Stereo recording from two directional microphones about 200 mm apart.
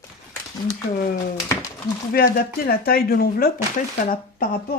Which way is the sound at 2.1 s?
50° left (ahead or behind).